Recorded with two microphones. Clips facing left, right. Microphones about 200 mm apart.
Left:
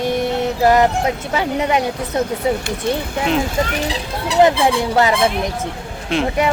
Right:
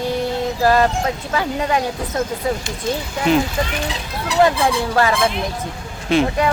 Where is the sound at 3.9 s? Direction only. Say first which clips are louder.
Left 3 dB; 25° left (ahead or behind).